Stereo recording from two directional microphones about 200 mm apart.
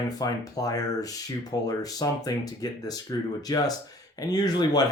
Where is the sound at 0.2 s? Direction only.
20° left (ahead or behind).